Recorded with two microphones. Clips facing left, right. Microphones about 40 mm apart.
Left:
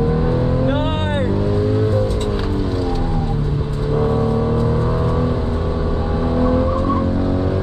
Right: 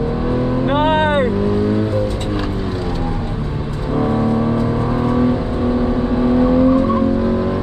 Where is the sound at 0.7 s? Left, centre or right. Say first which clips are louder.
Right 5 dB; right.